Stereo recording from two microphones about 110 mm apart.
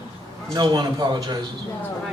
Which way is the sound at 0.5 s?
40° right (ahead or behind).